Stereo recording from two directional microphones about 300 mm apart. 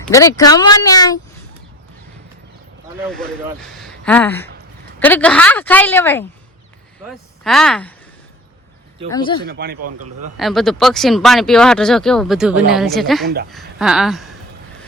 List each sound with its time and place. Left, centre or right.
0.1 s speech: centre
3.0 s speech: centre
9.0 s speech: centre
9.5 s speech: right
10.3 s speech: centre